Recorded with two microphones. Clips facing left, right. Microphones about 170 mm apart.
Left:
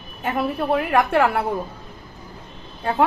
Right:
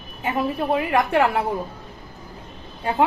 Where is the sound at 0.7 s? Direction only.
15° right (ahead or behind).